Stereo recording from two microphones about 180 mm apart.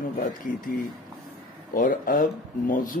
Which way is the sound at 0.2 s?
50° left (ahead or behind).